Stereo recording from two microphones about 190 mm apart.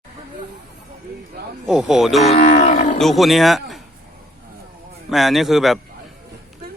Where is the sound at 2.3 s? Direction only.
40° left (ahead or behind).